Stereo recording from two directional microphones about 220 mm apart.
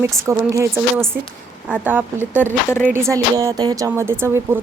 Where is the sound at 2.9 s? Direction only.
15° right (ahead or behind).